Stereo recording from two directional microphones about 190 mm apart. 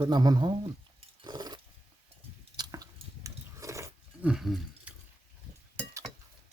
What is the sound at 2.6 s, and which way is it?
Chewing, 20° right (ahead or behind).